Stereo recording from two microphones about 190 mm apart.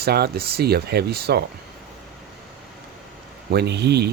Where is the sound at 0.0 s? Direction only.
55° right (ahead or behind).